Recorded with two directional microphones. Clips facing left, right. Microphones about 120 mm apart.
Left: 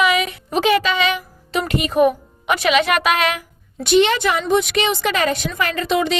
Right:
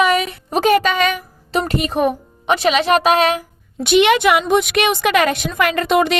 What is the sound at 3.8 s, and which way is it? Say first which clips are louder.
A woman's voice: right 2 dB; 65° right (ahead or behind).